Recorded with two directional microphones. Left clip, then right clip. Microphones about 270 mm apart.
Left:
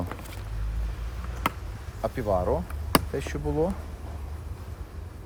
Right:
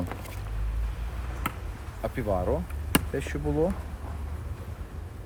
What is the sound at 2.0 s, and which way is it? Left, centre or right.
Speech, left.